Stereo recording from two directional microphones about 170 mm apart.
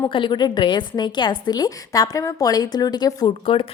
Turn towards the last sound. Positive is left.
turn(degrees=30)  # may be behind; listen again after turning